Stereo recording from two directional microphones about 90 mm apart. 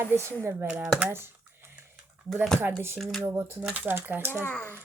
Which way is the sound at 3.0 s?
Centre (ahead or behind).